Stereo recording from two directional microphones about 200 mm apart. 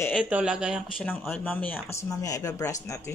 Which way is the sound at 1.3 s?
10° left (ahead or behind).